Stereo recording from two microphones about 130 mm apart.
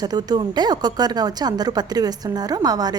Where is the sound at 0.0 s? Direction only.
30° right (ahead or behind).